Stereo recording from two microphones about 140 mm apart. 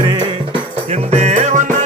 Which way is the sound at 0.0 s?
30° right (ahead or behind).